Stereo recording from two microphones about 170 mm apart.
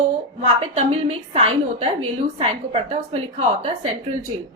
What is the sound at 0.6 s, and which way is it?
A woman's voice, 35° right (ahead or behind).